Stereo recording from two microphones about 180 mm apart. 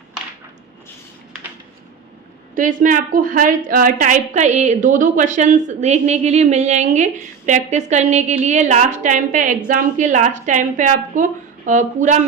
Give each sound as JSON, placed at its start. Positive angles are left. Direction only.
{"t": 2.6, "sound": "a woman's voice", "side_deg": -45}